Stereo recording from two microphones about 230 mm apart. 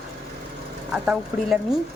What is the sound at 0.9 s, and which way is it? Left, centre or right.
Speech, centre.